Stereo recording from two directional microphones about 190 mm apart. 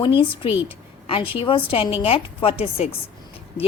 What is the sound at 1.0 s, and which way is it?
A woman's voice, 30° left (ahead or behind).